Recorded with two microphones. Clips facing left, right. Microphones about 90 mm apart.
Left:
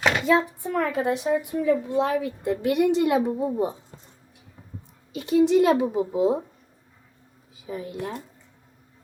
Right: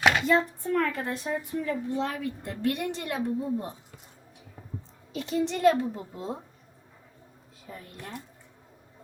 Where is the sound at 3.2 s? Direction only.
80° left.